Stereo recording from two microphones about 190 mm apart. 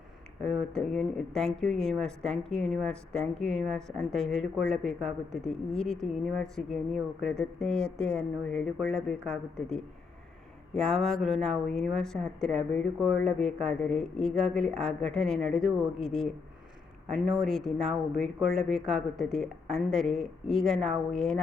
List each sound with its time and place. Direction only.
0.4 s speech: 5° left (ahead or behind)
10.8 s speech: 5° left (ahead or behind)
17.1 s speech: centre (ahead or behind)